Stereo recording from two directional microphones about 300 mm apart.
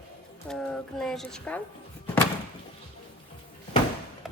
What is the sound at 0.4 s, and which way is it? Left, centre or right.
Speech, centre.